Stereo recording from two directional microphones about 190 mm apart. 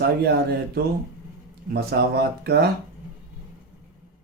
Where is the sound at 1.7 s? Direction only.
55° right (ahead or behind).